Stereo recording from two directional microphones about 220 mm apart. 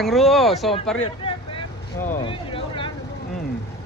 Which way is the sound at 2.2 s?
25° left (ahead or behind).